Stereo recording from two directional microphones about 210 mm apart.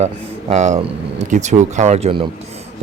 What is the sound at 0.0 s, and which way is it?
A man's voice, 30° right (ahead or behind).